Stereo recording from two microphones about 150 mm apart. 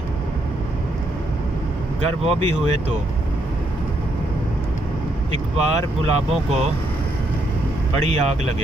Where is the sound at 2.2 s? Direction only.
45° right (ahead or behind).